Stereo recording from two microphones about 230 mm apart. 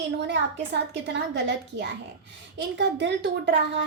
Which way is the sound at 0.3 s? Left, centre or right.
Right.